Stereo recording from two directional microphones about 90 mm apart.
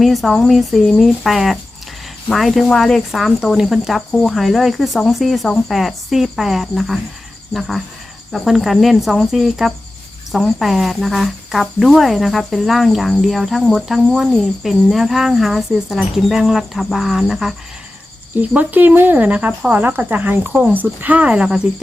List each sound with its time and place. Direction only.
0.0 s cricket: centre (ahead or behind)
8.3 s cricket: centre (ahead or behind)
18.3 s speech: 20° right (ahead or behind)